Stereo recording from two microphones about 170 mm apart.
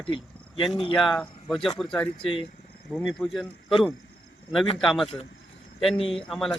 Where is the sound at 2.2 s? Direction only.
30° left (ahead or behind).